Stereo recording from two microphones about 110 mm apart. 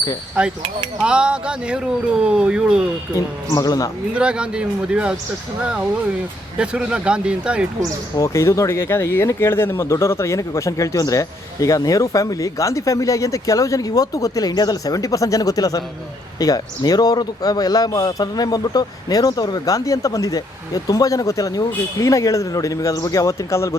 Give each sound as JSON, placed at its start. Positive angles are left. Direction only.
{"t": 1.0, "sound": "speech", "side_deg": -10}
{"t": 3.5, "sound": "speech", "side_deg": 35}
{"t": 4.1, "sound": "speech", "side_deg": -10}
{"t": 6.6, "sound": "speech", "side_deg": -10}
{"t": 8.1, "sound": "speech", "side_deg": 25}